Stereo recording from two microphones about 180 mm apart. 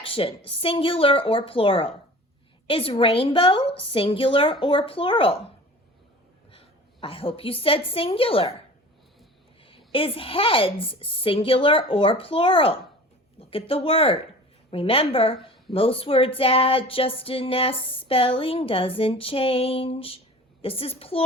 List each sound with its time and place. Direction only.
0.0 s a woman's voice: 30° left (ahead or behind)
6.5 s a woman's voice: 30° left (ahead or behind)
9.6 s a sound: 30° left (ahead or behind)